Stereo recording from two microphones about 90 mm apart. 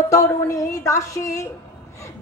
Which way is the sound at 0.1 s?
35° left (ahead or behind).